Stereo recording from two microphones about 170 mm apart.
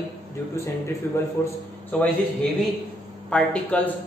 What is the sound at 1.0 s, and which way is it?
Speech, 10° left (ahead or behind).